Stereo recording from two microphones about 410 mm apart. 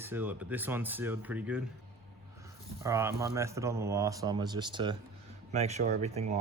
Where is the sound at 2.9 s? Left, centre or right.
Centre.